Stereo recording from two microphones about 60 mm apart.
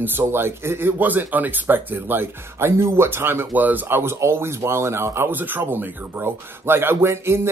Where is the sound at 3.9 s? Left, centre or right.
Right.